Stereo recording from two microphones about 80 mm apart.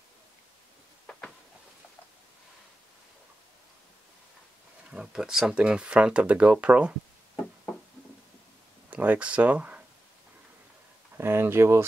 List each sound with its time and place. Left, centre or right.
4.8 s speech: centre
8.9 s speech: centre
11.1 s speech: right